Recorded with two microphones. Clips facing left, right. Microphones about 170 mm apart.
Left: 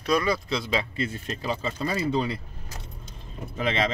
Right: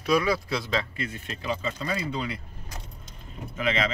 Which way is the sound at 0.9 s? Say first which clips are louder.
Left 4 dB; 30° left (ahead or behind).